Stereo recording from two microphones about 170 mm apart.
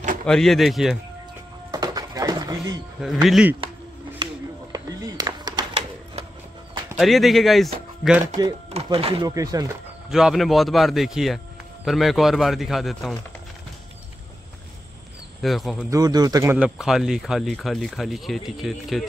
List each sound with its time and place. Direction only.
0.3 s speech: centre (ahead or behind)
1.7 s music: 20° right (ahead or behind)
3.3 s speech: 5° right (ahead or behind)
4.7 s a sound: 20° right (ahead or behind)
7.0 s speech: centre (ahead or behind)
8.6 s speech: 35° right (ahead or behind)
9.3 s speech: 20° right (ahead or behind)
10.0 s speech: 5° right (ahead or behind)
15.4 s speech: centre (ahead or behind)
15.9 s speech: 25° right (ahead or behind)
16.5 s speech: 5° right (ahead or behind)